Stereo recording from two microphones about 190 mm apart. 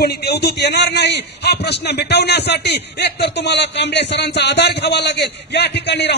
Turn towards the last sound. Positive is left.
turn(degrees=65)  # may be behind; listen again after turning